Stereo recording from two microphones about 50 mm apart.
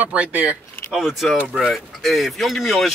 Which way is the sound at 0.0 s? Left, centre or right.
Right.